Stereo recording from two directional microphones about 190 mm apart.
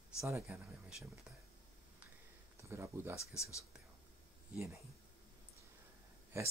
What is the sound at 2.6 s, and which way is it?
Speech, 15° right (ahead or behind).